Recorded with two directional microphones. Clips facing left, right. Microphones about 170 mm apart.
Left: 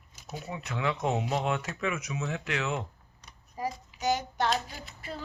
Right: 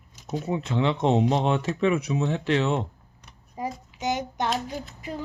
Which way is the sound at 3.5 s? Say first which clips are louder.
Right 2 dB; 20° right (ahead or behind).